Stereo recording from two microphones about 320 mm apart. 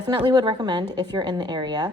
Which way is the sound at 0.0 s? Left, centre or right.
Centre.